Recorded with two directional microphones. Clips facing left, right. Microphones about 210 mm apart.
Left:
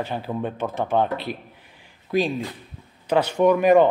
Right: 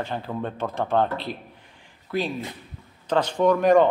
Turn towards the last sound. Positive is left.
turn(degrees=5)  # may be behind; listen again after turning